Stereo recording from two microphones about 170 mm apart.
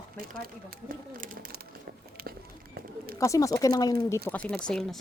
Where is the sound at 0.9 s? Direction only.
55° right (ahead or behind).